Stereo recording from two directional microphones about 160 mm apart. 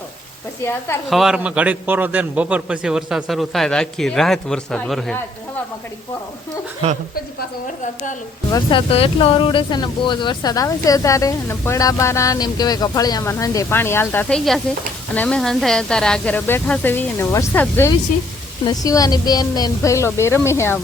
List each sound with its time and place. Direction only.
1.1 s a man's voice: 5° right (ahead or behind)
6.8 s a woman's voice: 40° right (ahead or behind)
8.5 s speech: 35° left (ahead or behind); by 17.9 s 15° left (ahead or behind)
18.6 s speech: 25° left (ahead or behind)